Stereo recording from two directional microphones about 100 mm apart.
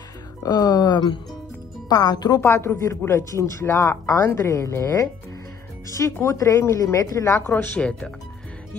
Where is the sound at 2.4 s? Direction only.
25° left (ahead or behind).